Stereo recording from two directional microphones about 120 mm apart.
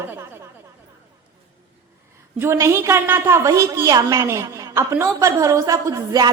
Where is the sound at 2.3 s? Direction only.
20° right (ahead or behind).